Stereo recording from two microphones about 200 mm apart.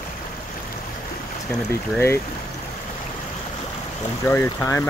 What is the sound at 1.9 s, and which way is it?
Speech, 10° left (ahead or behind).